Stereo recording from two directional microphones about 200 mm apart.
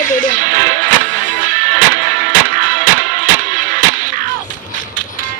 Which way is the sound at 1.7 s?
40° right (ahead or behind).